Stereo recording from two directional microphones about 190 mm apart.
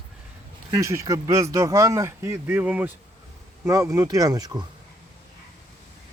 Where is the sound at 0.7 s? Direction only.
15° right (ahead or behind).